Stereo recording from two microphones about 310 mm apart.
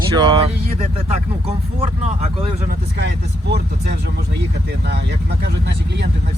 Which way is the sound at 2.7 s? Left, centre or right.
Right.